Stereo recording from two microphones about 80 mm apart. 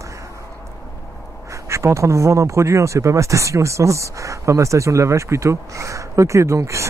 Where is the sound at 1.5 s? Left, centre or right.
Right.